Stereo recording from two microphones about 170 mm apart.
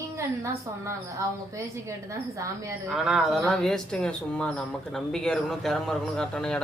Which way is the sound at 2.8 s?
5° right (ahead or behind).